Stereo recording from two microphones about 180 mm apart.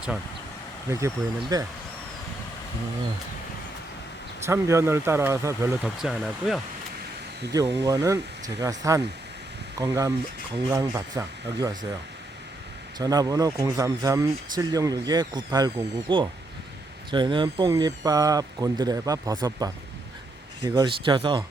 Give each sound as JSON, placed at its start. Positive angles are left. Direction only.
{"t": 0.9, "sound": "speech", "side_deg": -15}
{"t": 4.4, "sound": "speech", "side_deg": -15}
{"t": 5.8, "sound": "speech", "side_deg": 0}
{"t": 7.8, "sound": "speech", "side_deg": -20}
{"t": 13.0, "sound": "speech", "side_deg": -20}